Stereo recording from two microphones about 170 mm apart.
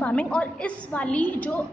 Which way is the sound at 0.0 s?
5° left (ahead or behind).